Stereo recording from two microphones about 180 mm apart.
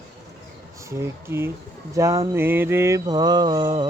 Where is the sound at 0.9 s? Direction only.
15° right (ahead or behind).